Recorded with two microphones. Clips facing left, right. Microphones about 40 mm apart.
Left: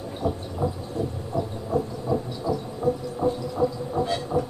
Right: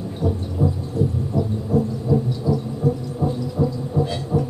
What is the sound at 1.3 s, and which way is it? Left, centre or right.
Heart murmur, centre.